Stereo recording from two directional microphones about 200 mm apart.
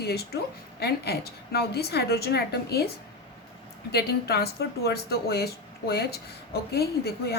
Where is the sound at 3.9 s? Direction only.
55° left (ahead or behind).